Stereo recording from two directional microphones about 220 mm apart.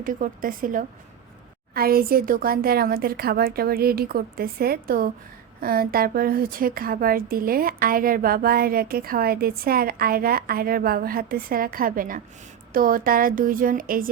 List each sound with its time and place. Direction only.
0.0 s a woman's voice: 40° right (ahead or behind)